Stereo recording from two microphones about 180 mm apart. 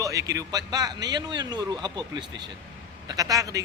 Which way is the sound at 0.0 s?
20° right (ahead or behind).